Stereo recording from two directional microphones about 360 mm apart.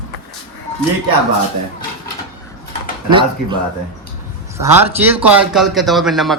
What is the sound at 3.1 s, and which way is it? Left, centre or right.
A man's voice, centre.